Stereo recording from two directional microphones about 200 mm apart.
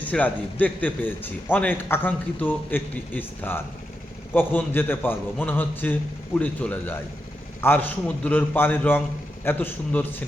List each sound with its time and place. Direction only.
0.0 s a man's voice: 5° left (ahead or behind)